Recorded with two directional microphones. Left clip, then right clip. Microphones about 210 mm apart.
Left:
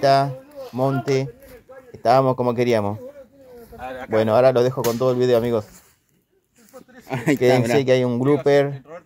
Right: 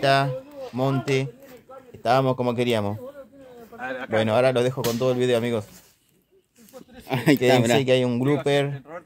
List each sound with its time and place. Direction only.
0.0 s speech: 10° left (ahead or behind)
3.8 s a man's voice: 45° right (ahead or behind)
4.1 s speech: 10° left (ahead or behind)
7.1 s a man's voice: 5° right (ahead or behind)
7.8 s speech: 10° left (ahead or behind)